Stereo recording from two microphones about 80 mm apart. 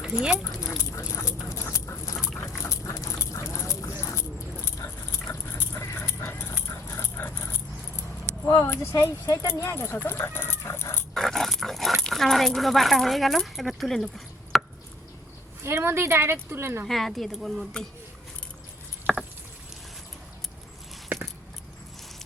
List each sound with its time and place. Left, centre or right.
0.0 s speech: centre
0.8 s speech: left
2.3 s speech: centre
2.6 s speech: left
4.0 s a sound: left
5.3 s dog: left
8.6 s speech: left
9.7 s speech: left
11.1 s dog: centre
14.5 s drip: centre
15.6 s speech: right
16.8 s speech: centre
19.1 s patter: centre